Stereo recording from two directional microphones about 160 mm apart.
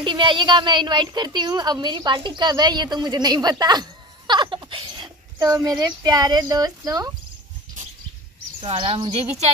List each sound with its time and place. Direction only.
0.0 s a woman's voice: 30° right (ahead or behind)
8.5 s speech: 35° right (ahead or behind)